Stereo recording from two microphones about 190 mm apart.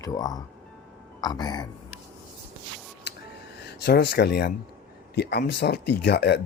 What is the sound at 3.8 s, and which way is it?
A man's voice, 60° left (ahead or behind).